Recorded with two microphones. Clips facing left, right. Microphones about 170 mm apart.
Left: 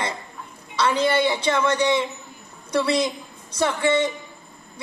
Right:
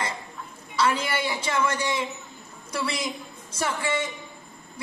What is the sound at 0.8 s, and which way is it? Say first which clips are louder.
Speech: left 7 dB; 25° left (ahead or behind).